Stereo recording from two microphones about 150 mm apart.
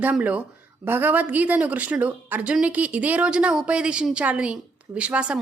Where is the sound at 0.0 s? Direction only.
10° right (ahead or behind).